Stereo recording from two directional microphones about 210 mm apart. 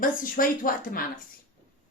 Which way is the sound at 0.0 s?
40° left (ahead or behind).